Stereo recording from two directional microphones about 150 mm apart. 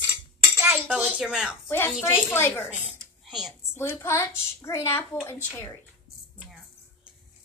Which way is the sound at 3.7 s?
15° left (ahead or behind).